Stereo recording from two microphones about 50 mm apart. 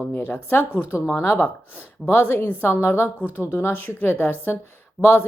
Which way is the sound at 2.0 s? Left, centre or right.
Left.